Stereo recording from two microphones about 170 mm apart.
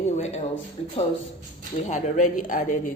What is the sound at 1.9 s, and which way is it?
Speech, 50° left (ahead or behind).